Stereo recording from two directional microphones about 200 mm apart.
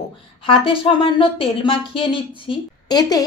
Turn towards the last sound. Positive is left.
turn(degrees=20)  # may be behind; listen again after turning